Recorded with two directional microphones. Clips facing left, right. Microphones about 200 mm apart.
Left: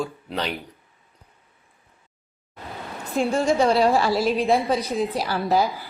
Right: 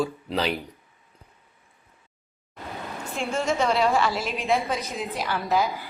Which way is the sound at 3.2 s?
35° left (ahead or behind).